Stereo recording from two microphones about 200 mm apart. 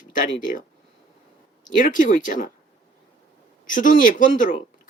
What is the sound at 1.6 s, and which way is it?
Speech, 40° left (ahead or behind).